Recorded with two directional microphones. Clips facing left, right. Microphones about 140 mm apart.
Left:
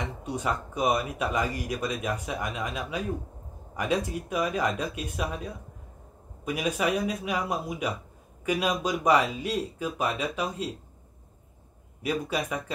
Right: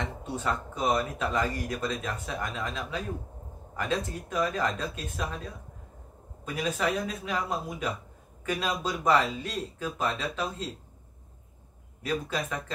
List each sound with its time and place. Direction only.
0.0 s speech: 15° left (ahead or behind)
12.0 s speech: 10° left (ahead or behind)